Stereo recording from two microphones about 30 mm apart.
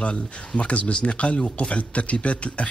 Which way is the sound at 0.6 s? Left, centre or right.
Left.